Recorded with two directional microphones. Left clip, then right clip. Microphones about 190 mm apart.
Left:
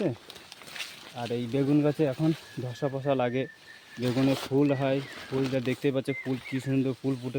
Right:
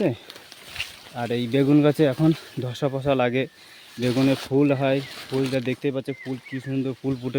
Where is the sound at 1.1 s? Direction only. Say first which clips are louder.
Right 7 dB; 50° right (ahead or behind); by 5.7 s 25° right (ahead or behind).